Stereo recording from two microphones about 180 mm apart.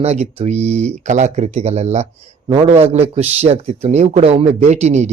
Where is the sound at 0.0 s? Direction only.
35° right (ahead or behind).